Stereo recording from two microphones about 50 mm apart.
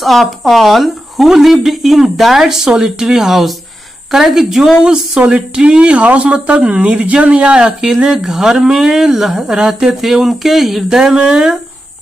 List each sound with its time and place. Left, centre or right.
0.0 s speech: centre